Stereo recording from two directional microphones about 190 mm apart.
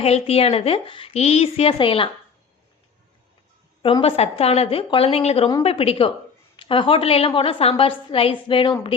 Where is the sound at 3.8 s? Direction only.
30° left (ahead or behind).